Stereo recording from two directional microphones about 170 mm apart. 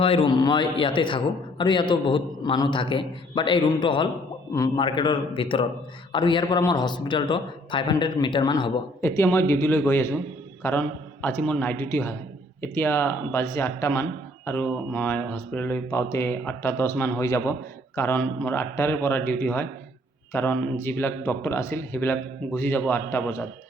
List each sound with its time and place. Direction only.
0.0 s a man's voice: 30° left (ahead or behind); by 23.4 s 15° left (ahead or behind)